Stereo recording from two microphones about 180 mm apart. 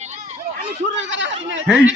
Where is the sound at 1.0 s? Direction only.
90° right.